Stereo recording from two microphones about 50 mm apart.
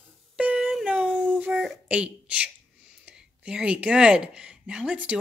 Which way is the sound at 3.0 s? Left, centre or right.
Right.